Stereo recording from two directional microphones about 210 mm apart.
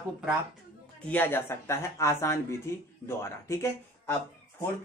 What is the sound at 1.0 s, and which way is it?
Speech, 10° left (ahead or behind).